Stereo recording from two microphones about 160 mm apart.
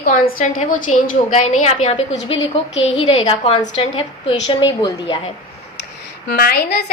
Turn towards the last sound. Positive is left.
turn(degrees=90)